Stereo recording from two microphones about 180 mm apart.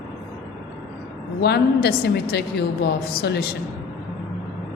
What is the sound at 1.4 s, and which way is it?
A woman's voice, 65° left (ahead or behind).